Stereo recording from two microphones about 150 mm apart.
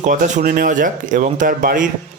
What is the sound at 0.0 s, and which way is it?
Speech, 60° right (ahead or behind).